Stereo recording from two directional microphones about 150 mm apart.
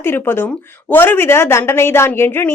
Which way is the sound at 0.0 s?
15° left (ahead or behind).